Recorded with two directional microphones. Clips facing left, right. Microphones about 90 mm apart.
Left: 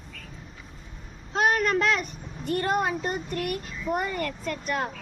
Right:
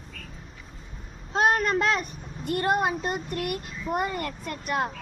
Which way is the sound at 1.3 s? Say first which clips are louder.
Right 1 dB; 25° right (ahead or behind).